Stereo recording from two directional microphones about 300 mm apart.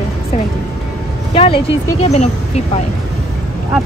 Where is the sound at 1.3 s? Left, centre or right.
Centre.